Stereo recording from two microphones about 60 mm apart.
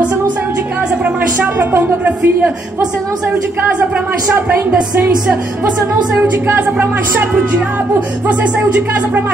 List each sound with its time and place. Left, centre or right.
1.0 s a woman's voice: right
6.4 s speech: right
8.3 s speech: right